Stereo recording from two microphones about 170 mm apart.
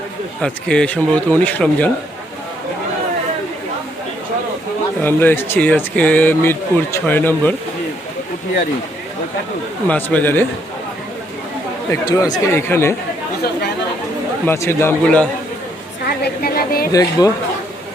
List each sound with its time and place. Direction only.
0.4 s speech: 5° left (ahead or behind)
5.0 s speech: 15° left (ahead or behind)
9.8 s speech: 10° left (ahead or behind)
11.9 s speech: 20° left (ahead or behind)
14.4 s speech: 15° left (ahead or behind)
16.0 s a sound: 65° left (ahead or behind)
16.9 s speech: 20° left (ahead or behind)